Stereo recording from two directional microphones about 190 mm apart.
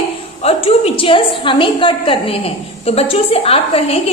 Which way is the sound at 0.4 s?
30° left (ahead or behind).